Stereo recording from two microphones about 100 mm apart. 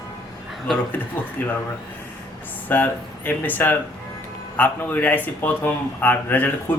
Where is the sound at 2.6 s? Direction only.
20° left (ahead or behind).